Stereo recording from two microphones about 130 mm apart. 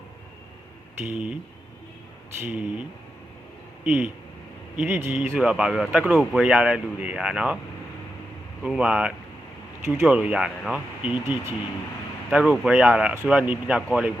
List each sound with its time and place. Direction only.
1.1 s speech: 10° right (ahead or behind)
2.4 s speech: 15° right (ahead or behind)
3.8 s speech: 10° right (ahead or behind)
5.4 s speech: 5° right (ahead or behind)
8.6 s speech: 5° right (ahead or behind)